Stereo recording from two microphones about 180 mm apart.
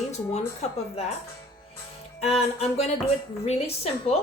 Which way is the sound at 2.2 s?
35° left (ahead or behind).